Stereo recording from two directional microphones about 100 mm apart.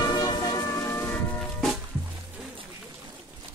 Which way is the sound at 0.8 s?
25° left (ahead or behind).